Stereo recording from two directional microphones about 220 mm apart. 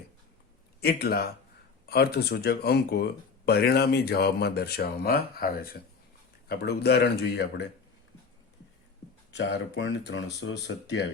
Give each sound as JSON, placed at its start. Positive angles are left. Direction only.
{"t": 0.8, "sound": "speech", "side_deg": 45}
{"t": 9.3, "sound": "speech", "side_deg": 55}